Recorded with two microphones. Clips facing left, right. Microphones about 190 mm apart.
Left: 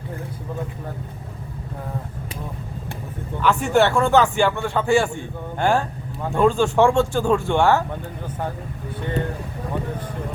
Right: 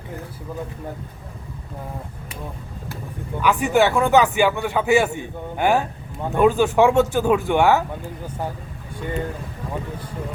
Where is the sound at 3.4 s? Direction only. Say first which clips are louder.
Even; 15° right (ahead or behind).